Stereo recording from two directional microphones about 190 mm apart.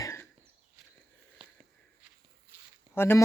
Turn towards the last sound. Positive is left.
turn(degrees=10)  # may be behind; listen again after turning